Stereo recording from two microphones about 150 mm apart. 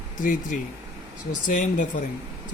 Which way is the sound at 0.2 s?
60° left (ahead or behind).